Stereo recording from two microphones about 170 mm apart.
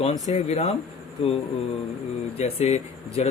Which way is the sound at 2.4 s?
40° left (ahead or behind).